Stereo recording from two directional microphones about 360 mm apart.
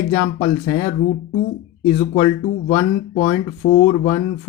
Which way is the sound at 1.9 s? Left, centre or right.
Centre.